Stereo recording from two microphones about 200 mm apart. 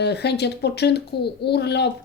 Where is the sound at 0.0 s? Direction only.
55° left (ahead or behind).